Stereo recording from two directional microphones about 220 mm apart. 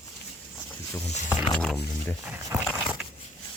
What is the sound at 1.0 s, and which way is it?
Speech, 30° left (ahead or behind).